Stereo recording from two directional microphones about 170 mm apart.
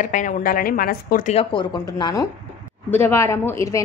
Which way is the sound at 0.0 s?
50° left (ahead or behind).